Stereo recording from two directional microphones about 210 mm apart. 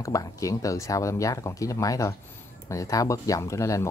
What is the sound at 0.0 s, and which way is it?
Speech, 15° left (ahead or behind).